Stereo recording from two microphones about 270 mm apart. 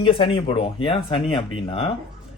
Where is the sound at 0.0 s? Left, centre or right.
Centre.